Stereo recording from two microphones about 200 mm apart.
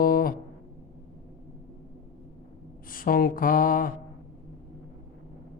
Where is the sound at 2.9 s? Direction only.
45° left (ahead or behind).